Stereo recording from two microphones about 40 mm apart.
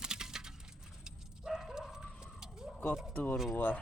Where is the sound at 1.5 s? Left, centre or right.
Centre.